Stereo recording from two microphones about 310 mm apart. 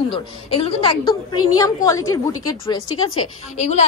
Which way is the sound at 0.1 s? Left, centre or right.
Centre.